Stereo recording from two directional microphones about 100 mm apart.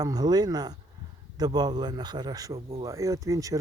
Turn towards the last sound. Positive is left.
turn(degrees=-35)  # may be behind; listen again after turning